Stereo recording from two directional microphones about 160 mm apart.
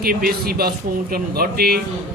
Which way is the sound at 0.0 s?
70° right (ahead or behind).